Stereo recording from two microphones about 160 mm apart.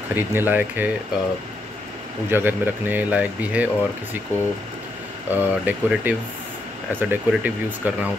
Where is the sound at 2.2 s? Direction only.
10° right (ahead or behind).